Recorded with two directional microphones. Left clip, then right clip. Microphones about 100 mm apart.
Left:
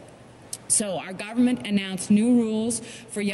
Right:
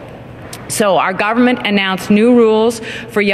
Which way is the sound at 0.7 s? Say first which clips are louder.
Right 17 dB; 20° right (ahead or behind).